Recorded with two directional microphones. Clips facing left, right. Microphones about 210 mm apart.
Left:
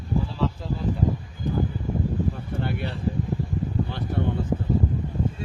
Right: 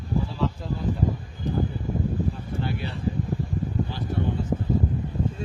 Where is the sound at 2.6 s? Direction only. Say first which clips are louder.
Left 1 dB; 55° left (ahead or behind).